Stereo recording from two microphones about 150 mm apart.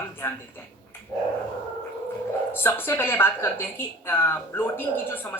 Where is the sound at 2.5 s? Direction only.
15° left (ahead or behind).